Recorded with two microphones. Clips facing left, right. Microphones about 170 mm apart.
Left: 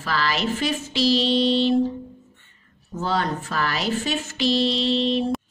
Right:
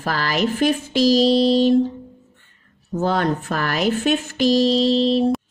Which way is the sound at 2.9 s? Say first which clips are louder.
Right 5 dB; 55° right (ahead or behind).